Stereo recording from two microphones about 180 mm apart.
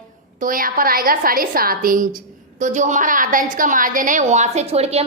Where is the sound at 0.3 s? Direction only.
50° right (ahead or behind).